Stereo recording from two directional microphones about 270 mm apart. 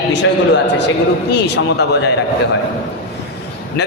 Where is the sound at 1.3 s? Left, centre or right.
Left.